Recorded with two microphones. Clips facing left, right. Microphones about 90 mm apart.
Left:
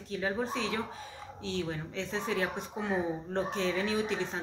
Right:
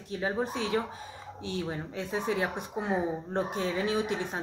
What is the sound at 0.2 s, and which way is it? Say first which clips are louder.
Speech: right 2 dB; 20° right (ahead or behind).